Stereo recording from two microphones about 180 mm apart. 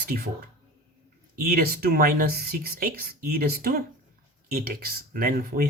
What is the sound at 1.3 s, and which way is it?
Speech, 55° right (ahead or behind).